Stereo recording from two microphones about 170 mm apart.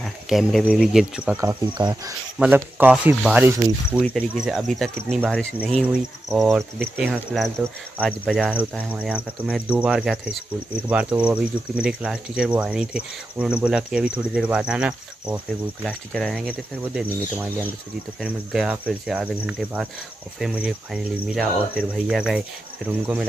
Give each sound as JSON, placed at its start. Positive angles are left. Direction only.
{"t": 0.0, "sound": "speech", "side_deg": 0}
{"t": 1.3, "sound": "speech", "side_deg": -15}
{"t": 2.3, "sound": "speech", "side_deg": -5}